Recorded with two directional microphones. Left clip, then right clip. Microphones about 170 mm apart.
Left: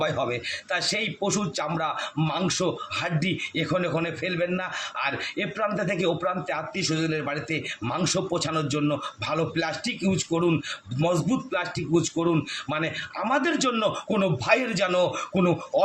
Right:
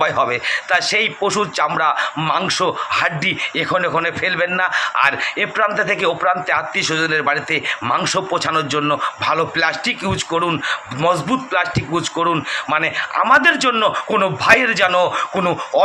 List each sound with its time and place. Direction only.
0.0 s a man's voice: 20° left (ahead or behind)